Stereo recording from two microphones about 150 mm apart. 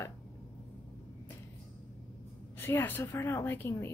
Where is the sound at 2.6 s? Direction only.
15° left (ahead or behind).